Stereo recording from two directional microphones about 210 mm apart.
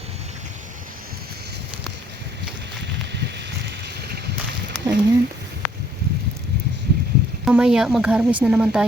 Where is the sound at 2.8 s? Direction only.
55° right (ahead or behind).